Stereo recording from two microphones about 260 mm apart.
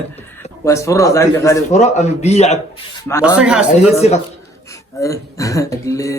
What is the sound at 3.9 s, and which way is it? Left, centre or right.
Speech, left.